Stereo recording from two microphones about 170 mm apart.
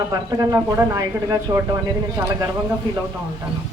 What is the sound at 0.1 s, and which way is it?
Speech, 20° right (ahead or behind).